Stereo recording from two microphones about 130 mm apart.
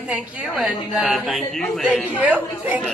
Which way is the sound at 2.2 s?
10° right (ahead or behind).